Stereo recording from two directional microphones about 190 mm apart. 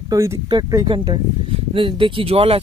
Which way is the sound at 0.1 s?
15° right (ahead or behind).